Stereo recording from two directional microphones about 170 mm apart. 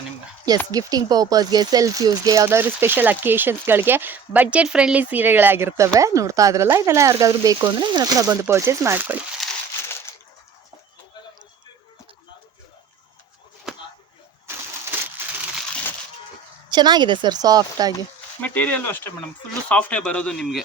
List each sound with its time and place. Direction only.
0.7 s speech: 20° right (ahead or behind)
9.4 s crumpling: centre (ahead or behind)
13.7 s a sound: 5° right (ahead or behind)
16.6 s a woman's voice: 25° right (ahead or behind)
18.4 s speech: 10° left (ahead or behind)